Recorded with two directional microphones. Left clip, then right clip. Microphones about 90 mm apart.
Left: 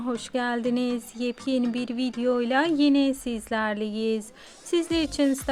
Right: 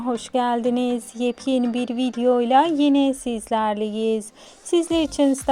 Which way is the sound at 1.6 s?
20° right (ahead or behind).